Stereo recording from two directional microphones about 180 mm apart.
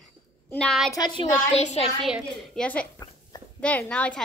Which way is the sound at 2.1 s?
5° left (ahead or behind).